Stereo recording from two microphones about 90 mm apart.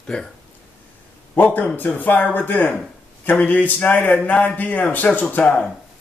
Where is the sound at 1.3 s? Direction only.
15° left (ahead or behind).